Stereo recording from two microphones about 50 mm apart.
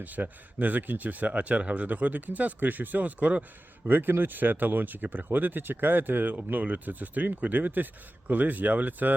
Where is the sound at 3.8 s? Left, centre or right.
Right.